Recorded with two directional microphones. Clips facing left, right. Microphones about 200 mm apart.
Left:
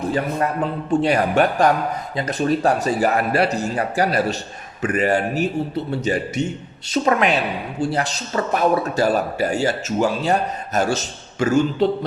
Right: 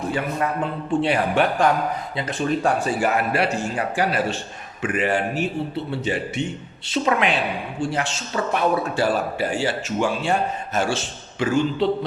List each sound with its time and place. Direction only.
0.9 s a man's voice: 45° left (ahead or behind)